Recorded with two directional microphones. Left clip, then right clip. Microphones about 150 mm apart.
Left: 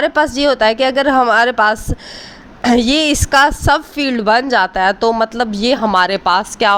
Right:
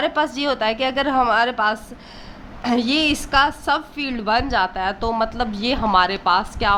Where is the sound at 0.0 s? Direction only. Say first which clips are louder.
Left 7 dB; 35° left (ahead or behind).